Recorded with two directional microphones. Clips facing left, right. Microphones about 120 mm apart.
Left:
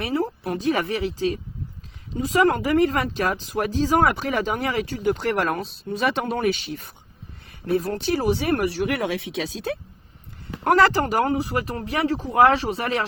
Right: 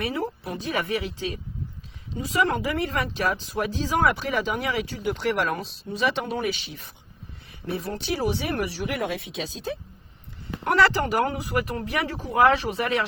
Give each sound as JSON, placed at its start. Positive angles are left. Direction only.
{"t": 0.0, "sound": "speech", "side_deg": 35}
{"t": 10.6, "sound": "speech", "side_deg": 40}